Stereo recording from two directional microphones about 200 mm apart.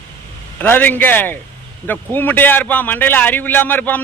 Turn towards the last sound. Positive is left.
turn(degrees=10)  # may be behind; listen again after turning